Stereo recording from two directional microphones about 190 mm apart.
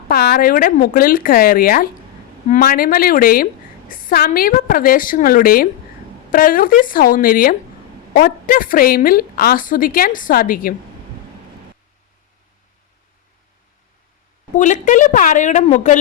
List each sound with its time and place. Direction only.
0.1 s a woman's voice: 55° left (ahead or behind)
14.5 s a woman's voice: 40° left (ahead or behind)